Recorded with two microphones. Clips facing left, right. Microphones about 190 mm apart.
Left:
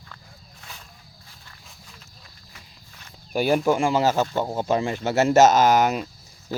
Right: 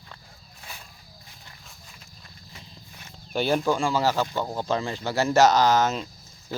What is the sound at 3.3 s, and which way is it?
Speech, 10° left (ahead or behind).